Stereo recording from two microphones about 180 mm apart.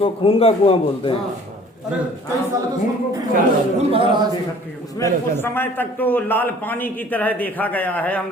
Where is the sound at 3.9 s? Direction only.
30° right (ahead or behind).